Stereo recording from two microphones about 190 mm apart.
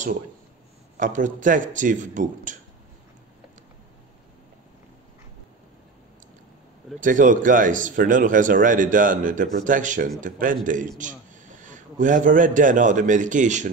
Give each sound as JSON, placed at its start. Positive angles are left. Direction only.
{"t": 0.9, "sound": "speech", "side_deg": -40}
{"t": 7.0, "sound": "a man's voice", "side_deg": -45}